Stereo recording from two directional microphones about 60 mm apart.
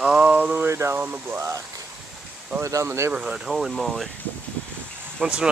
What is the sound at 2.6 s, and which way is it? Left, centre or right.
Speech, right.